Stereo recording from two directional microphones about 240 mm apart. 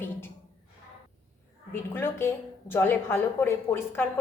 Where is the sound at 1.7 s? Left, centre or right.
Centre.